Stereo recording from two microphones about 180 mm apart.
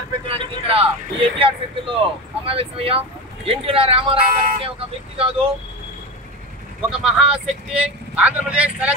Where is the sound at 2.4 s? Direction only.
30° right (ahead or behind).